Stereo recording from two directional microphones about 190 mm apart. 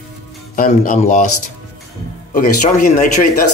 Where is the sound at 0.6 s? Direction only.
40° left (ahead or behind).